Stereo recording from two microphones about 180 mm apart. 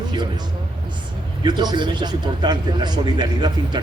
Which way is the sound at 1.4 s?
25° right (ahead or behind).